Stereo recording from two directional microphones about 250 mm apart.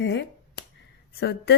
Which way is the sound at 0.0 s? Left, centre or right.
Left.